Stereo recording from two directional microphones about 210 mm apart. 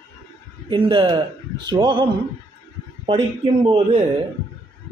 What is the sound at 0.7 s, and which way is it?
Speech, 25° right (ahead or behind).